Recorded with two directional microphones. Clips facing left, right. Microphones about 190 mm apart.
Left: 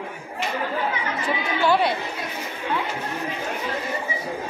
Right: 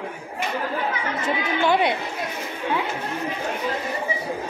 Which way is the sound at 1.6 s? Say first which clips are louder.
Even; 20° right (ahead or behind).